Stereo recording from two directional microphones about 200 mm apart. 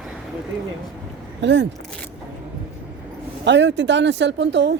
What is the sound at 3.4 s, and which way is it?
Speech, 60° right (ahead or behind).